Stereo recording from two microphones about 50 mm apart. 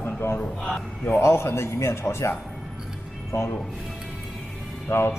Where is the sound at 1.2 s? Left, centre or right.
Left.